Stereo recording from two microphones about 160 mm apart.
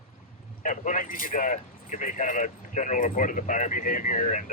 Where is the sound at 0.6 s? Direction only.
55° left (ahead or behind).